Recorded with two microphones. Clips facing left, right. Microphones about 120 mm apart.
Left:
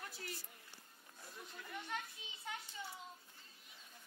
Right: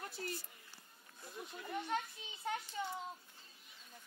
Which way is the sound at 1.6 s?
35° right (ahead or behind).